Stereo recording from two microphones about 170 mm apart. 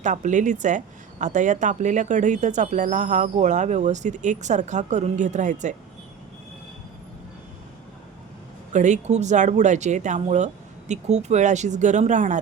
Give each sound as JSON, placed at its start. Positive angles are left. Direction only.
{"t": 0.0, "sound": "speech", "side_deg": -45}
{"t": 8.7, "sound": "speech", "side_deg": -45}